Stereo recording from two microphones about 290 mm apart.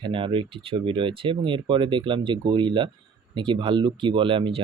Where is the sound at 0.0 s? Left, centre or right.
Centre.